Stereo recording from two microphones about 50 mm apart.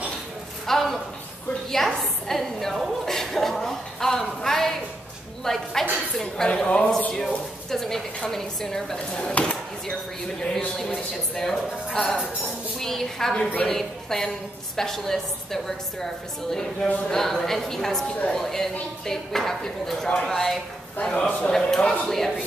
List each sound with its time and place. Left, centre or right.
0.7 s a sound: centre
1.7 s a woman's voice: centre
7.2 s a woman's voice: centre
8.9 s speech: centre
9.8 s a woman's voice: centre
17.1 s a woman's voice: centre